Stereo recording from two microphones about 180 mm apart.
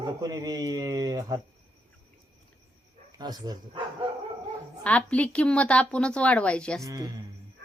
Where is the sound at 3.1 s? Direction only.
20° right (ahead or behind).